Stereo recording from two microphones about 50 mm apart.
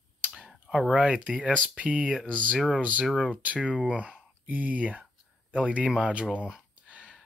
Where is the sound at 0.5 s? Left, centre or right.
Centre.